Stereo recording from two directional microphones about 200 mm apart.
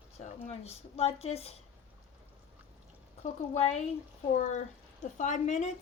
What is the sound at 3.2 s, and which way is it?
A woman's voice, 35° left (ahead or behind).